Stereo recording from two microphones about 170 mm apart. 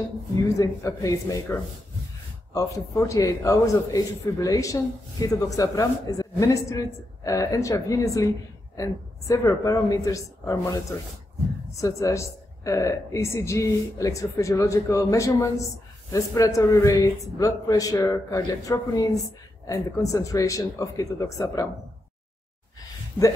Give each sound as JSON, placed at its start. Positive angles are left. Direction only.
{"t": 0.6, "sound": "a man's voice", "side_deg": 20}